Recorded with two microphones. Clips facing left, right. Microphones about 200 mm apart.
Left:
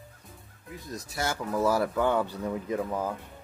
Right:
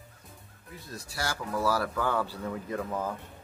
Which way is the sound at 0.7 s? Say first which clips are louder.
Left 3 dB; 20° left (ahead or behind).